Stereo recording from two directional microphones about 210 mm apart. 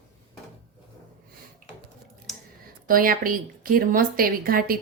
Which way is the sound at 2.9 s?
40° right (ahead or behind).